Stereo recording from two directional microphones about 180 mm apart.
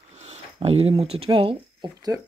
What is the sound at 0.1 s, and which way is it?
Speech, 40° right (ahead or behind).